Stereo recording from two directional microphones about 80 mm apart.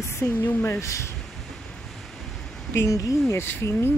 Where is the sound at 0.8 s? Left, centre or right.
Left.